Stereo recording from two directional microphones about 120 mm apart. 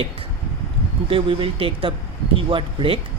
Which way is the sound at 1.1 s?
50° right (ahead or behind).